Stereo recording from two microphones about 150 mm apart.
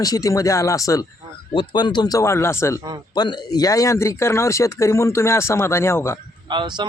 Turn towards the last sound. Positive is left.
turn(degrees=-30)  # may be behind; listen again after turning